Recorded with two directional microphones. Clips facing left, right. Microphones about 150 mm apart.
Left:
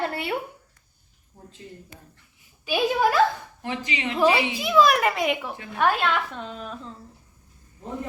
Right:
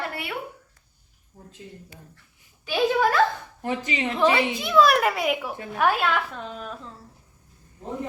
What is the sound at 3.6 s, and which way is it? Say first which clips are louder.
Speech: right 3 dB; 45° right (ahead or behind).